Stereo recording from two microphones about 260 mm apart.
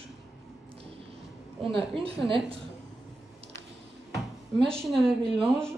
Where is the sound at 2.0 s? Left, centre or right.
Centre.